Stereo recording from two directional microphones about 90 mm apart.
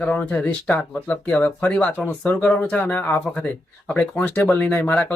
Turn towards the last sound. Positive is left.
turn(degrees=20)  # may be behind; listen again after turning